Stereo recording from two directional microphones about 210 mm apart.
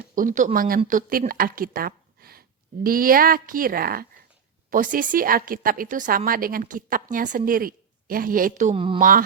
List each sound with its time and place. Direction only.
0.2 s a woman's voice: 40° right (ahead or behind)